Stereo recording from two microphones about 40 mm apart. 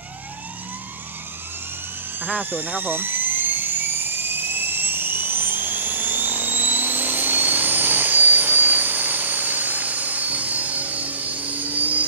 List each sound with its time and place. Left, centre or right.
2.1 s helicopter: right